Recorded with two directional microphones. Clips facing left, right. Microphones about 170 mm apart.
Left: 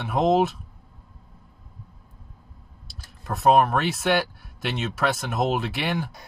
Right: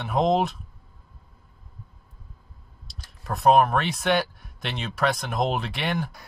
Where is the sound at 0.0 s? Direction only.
Centre (ahead or behind).